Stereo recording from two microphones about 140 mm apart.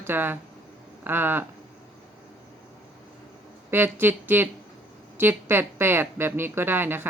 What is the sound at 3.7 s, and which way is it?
Speech, 15° right (ahead or behind).